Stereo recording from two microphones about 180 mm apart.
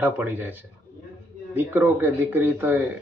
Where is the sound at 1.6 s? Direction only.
10° right (ahead or behind).